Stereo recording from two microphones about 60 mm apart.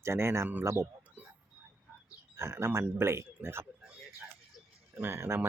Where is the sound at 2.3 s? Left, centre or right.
Right.